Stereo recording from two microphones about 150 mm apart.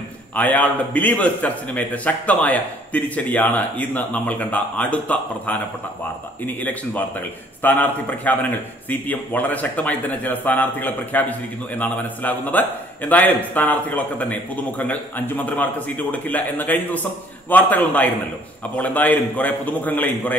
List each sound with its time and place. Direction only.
0.4 s a man's voice: 10° left (ahead or behind)